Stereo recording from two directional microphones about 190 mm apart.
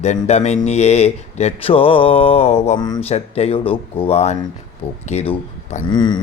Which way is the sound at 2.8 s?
20° left (ahead or behind).